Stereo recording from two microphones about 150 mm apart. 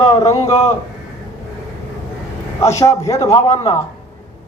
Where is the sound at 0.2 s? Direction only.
20° left (ahead or behind).